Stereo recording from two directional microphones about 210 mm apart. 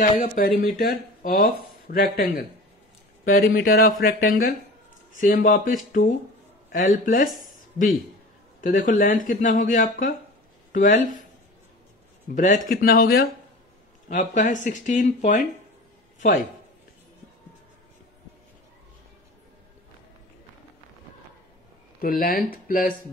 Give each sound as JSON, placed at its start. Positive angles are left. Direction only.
{"t": 0.0, "sound": "speech", "side_deg": 40}
{"t": 8.5, "sound": "speech", "side_deg": 40}
{"t": 12.4, "sound": "speech", "side_deg": 35}
{"t": 14.0, "sound": "speech", "side_deg": 35}
{"t": 22.0, "sound": "speech", "side_deg": 45}